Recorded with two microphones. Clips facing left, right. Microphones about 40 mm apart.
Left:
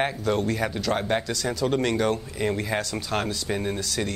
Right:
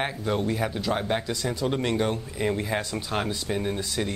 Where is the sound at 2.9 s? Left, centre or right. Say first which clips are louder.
Left 1 dB; centre.